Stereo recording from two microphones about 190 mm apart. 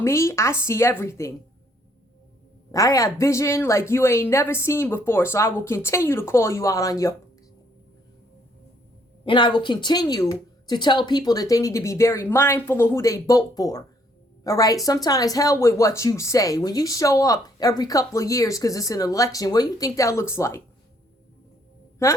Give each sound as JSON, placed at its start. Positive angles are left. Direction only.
{"t": 0.0, "sound": "speech", "side_deg": 15}
{"t": 2.7, "sound": "speech", "side_deg": 20}
{"t": 9.2, "sound": "a woman's voice", "side_deg": 25}